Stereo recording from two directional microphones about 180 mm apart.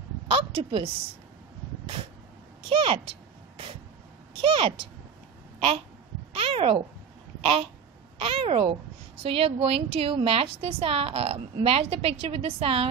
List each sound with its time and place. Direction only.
0.3 s a sound: 30° right (ahead or behind)
2.7 s a woman's voice: 30° right (ahead or behind)
4.4 s a woman's voice: 30° right (ahead or behind)
6.3 s speech: 30° right (ahead or behind)
8.2 s a woman's voice: 30° right (ahead or behind)